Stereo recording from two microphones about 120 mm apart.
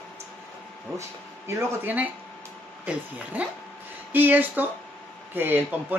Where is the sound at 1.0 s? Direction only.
25° right (ahead or behind).